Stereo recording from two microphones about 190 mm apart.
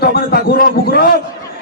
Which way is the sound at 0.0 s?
55° left (ahead or behind).